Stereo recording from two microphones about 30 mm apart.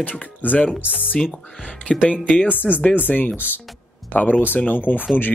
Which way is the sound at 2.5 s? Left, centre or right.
Left.